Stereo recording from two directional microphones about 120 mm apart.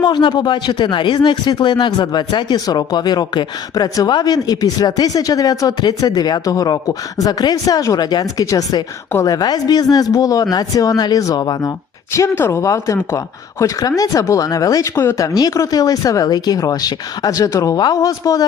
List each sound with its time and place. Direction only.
0.0 s speech: 40° left (ahead or behind)
12.1 s a woman's voice: 20° left (ahead or behind)